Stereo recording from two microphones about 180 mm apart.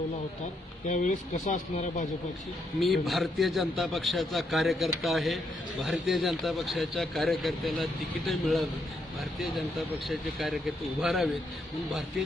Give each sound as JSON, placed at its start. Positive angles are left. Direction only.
{"t": 0.9, "sound": "speech", "side_deg": 45}
{"t": 2.8, "sound": "a man's voice", "side_deg": 0}
{"t": 10.1, "sound": "a man's voice", "side_deg": 0}